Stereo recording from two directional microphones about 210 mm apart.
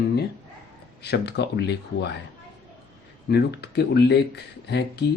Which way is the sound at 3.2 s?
50° left (ahead or behind).